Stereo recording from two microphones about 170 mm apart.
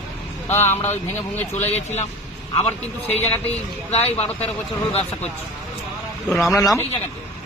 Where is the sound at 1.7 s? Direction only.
40° left (ahead or behind).